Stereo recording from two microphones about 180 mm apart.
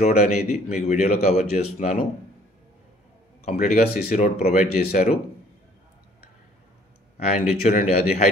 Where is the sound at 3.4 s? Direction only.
40° left (ahead or behind).